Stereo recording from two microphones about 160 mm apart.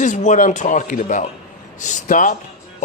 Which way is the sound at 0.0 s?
50° left (ahead or behind).